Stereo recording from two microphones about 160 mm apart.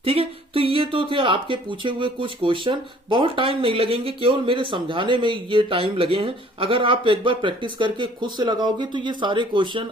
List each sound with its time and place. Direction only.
0.0 s speech: 35° right (ahead or behind)